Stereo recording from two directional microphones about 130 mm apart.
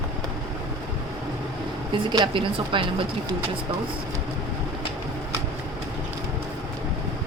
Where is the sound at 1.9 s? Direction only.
35° right (ahead or behind).